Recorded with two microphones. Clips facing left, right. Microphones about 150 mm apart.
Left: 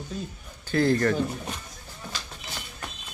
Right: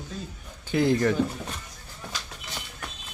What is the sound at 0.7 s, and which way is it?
Speech, 15° right (ahead or behind).